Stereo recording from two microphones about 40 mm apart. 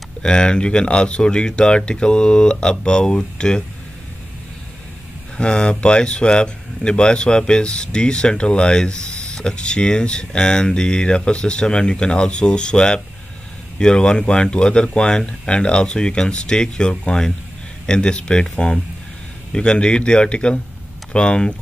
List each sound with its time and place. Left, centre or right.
0.2 s speech: left
5.4 s speech: left